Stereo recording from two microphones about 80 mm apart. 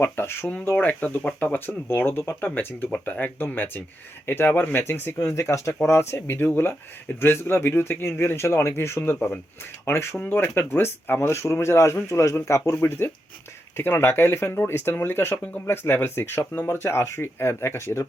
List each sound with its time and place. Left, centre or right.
0.0 s speech: left
5.1 s speech: left